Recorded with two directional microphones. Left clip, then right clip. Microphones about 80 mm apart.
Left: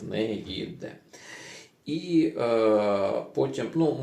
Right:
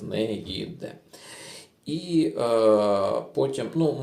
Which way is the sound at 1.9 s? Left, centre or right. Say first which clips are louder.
Even; right.